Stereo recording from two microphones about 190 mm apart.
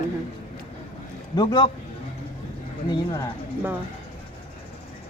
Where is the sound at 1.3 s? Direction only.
20° left (ahead or behind).